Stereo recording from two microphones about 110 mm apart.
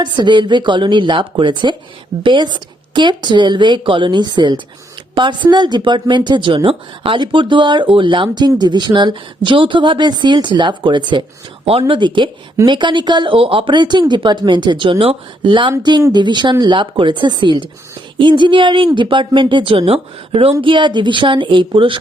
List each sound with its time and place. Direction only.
0.0 s speech: 45° right (ahead or behind)